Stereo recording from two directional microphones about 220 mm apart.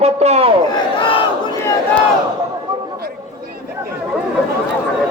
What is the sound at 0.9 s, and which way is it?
Battle cry, 20° left (ahead or behind).